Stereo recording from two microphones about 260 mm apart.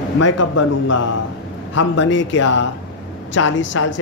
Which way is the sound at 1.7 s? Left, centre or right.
Left.